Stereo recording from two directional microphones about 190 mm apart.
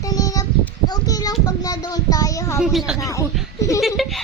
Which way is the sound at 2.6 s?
Centre (ahead or behind).